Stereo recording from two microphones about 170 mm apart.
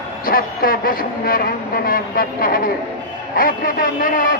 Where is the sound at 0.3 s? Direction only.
60° left (ahead or behind).